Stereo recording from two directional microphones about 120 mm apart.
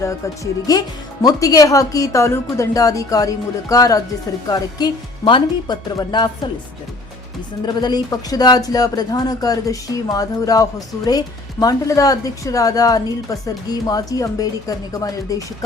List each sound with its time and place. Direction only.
0.7 s a woman's voice: 30° left (ahead or behind)
7.6 s a woman's voice: 35° left (ahead or behind)